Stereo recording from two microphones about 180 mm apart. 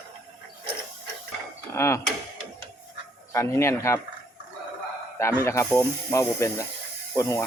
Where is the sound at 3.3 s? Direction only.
15° left (ahead or behind).